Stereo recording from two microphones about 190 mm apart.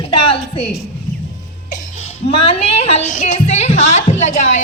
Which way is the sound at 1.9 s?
35° left (ahead or behind).